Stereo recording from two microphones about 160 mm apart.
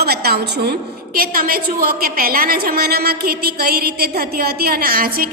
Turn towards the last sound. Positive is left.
turn(degrees=-65)  # may be behind; listen again after turning